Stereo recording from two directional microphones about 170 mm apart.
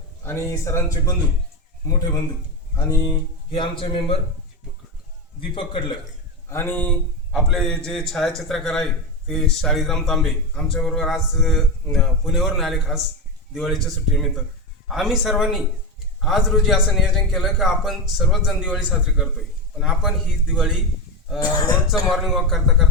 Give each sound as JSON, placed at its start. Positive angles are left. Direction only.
{"t": 0.3, "sound": "speech", "side_deg": 15}
{"t": 2.7, "sound": "speech", "side_deg": 20}
{"t": 5.4, "sound": "a man's voice", "side_deg": 30}
{"t": 6.5, "sound": "a man's voice", "side_deg": 10}
{"t": 21.3, "sound": "speech", "side_deg": 20}
{"t": 22.1, "sound": "a man's voice", "side_deg": 0}